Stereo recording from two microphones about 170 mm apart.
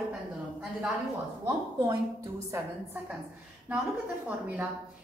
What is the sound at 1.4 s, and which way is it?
A woman's voice, 15° right (ahead or behind).